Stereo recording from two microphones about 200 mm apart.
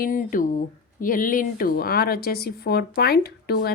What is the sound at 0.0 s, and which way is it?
Speech, 40° left (ahead or behind).